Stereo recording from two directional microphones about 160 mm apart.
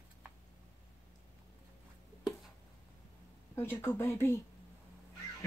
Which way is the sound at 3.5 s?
15° left (ahead or behind).